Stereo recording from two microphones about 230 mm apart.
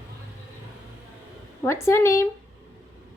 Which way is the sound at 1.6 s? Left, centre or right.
Centre.